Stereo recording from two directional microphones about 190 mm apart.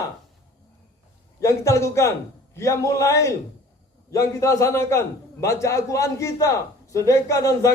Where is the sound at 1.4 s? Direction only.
15° left (ahead or behind).